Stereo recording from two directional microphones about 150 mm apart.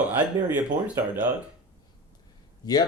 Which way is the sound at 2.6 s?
25° left (ahead or behind).